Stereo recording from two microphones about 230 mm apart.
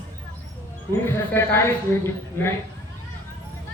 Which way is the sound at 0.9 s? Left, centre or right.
Centre.